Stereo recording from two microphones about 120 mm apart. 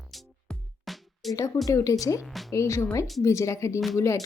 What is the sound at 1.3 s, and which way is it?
A woman's voice, 30° left (ahead or behind).